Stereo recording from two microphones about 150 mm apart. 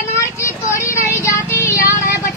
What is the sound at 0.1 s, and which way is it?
Vehicle, 20° left (ahead or behind).